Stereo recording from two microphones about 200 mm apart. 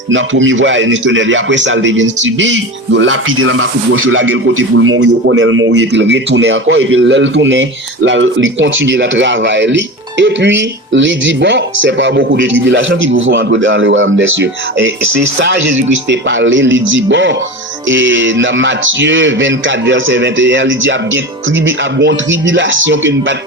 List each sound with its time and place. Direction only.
0.1 s a man's voice: 70° right (ahead or behind)
21.9 s a man's voice: 65° right (ahead or behind)